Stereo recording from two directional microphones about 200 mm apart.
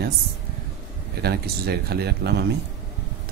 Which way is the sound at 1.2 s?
50° right (ahead or behind).